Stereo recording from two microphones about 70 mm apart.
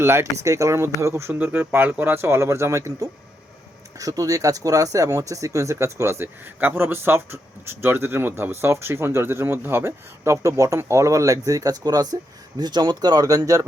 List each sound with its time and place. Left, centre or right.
0.0 s speech: right
1.3 s speech: right
3.9 s speech: right
6.2 s speech: right
10.4 s speech: right
13.3 s speech: right